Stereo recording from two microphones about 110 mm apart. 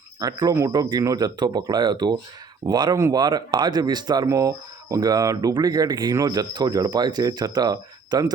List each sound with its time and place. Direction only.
0.2 s speech: 35° right (ahead or behind)